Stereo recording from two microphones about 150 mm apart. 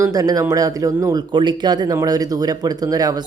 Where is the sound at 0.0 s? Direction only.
25° right (ahead or behind).